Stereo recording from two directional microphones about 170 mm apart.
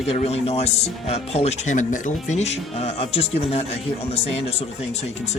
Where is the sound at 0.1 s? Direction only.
35° left (ahead or behind).